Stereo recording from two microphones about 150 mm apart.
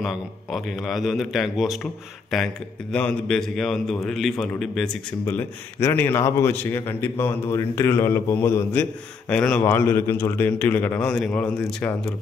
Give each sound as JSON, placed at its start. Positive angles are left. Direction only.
{"t": 0.0, "sound": "a man's voice", "side_deg": 0}
{"t": 5.2, "sound": "a man's voice", "side_deg": 15}